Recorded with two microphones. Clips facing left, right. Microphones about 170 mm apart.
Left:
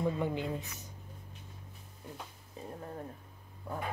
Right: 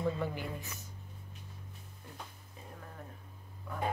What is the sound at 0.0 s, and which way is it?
Speech, 20° left (ahead or behind).